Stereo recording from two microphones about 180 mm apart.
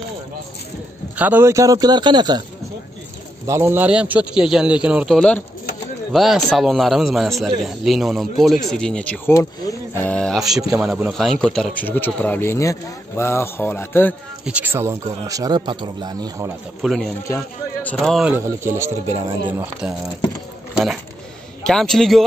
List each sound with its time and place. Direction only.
1.1 s speech: 10° right (ahead or behind)
3.4 s a man's voice: 15° right (ahead or behind)
11.1 s speech: centre (ahead or behind)
14.4 s speech: 10° right (ahead or behind)
16.8 s a man's voice: centre (ahead or behind)
18.3 s a man's voice: 15° right (ahead or behind)